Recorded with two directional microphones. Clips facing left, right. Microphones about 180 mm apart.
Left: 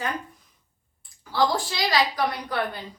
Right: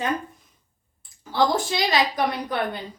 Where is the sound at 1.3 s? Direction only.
20° right (ahead or behind).